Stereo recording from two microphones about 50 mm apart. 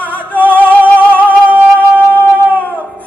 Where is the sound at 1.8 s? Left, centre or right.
Right.